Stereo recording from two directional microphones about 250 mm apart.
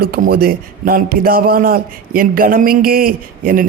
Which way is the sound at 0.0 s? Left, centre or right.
Right.